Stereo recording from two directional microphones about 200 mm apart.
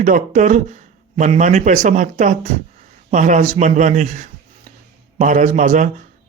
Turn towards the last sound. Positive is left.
turn(degrees=-40)  # may be behind; listen again after turning